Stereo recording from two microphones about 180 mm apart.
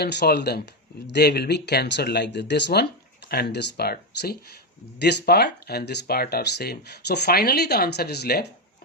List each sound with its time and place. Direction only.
0.0 s speech: 65° left (ahead or behind)